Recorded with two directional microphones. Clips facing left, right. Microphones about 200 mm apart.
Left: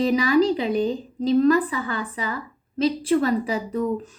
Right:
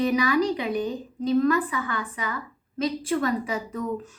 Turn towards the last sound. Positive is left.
turn(degrees=35)  # may be behind; listen again after turning